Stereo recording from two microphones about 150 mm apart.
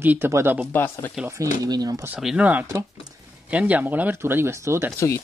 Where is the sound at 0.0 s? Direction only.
15° right (ahead or behind).